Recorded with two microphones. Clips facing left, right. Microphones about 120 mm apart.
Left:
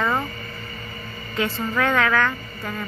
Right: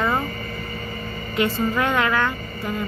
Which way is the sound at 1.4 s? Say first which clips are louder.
Right 2 dB; 15° right (ahead or behind).